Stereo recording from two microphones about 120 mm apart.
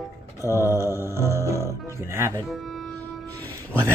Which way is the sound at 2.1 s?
25° right (ahead or behind).